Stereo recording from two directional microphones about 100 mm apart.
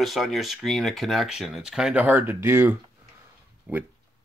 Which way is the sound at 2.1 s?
20° right (ahead or behind).